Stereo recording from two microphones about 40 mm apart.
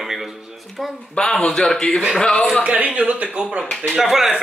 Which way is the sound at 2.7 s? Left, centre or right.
Right.